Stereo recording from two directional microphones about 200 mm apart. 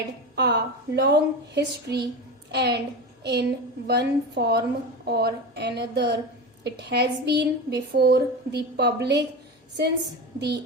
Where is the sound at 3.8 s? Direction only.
55° right (ahead or behind).